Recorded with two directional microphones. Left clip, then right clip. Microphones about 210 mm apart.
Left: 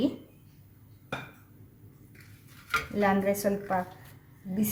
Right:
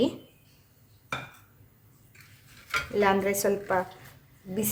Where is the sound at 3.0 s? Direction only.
40° right (ahead or behind).